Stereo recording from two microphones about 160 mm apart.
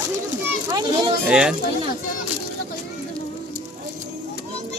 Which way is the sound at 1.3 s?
5° right (ahead or behind).